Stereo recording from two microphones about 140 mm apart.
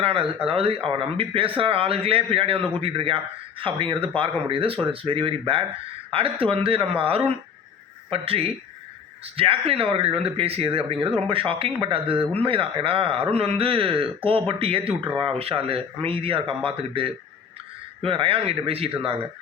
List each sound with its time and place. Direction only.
0.0 s speech: 40° right (ahead or behind)